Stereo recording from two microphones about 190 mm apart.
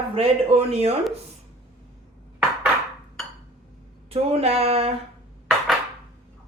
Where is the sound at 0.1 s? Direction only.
30° right (ahead or behind).